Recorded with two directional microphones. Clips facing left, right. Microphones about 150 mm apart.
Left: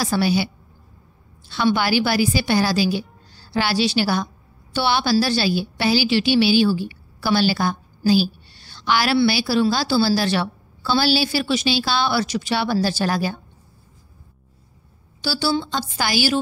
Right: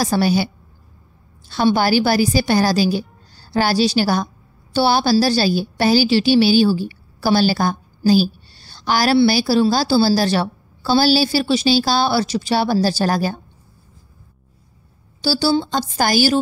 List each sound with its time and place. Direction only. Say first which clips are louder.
0.0 s a woman's voice: right 3 dB; 40° right (ahead or behind)
1.5 s a woman's voice: right 3 dB; 40° right (ahead or behind)
15.2 s a woman's voice: right 5 dB; 35° right (ahead or behind)